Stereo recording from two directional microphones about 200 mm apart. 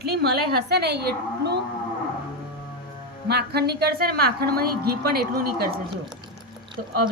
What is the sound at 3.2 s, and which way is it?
A woman's voice, 55° right (ahead or behind).